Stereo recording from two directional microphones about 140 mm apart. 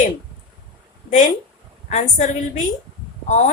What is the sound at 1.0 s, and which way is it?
Speech, 60° left (ahead or behind).